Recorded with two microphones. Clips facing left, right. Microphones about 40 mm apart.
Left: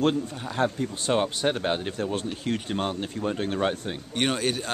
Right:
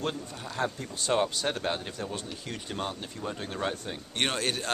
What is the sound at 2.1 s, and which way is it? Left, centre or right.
Speech, left.